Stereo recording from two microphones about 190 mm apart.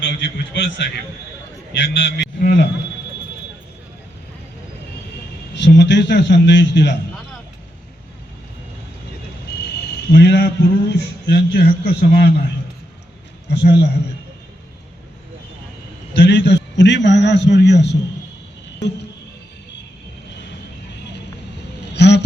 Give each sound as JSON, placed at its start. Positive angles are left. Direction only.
{"t": 0.0, "sound": "a man's voice", "side_deg": 65}
{"t": 5.5, "sound": "a man's voice", "side_deg": 65}
{"t": 9.6, "sound": "a man's voice", "side_deg": 65}
{"t": 13.5, "sound": "a man's voice", "side_deg": 65}
{"t": 16.1, "sound": "a man's voice", "side_deg": 65}
{"t": 21.9, "sound": "a sound", "side_deg": 65}